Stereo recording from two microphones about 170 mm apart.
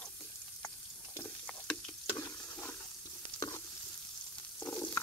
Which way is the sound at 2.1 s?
20° left (ahead or behind).